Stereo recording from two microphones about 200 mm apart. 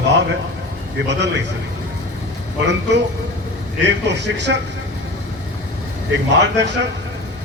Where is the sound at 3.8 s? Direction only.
60° right (ahead or behind).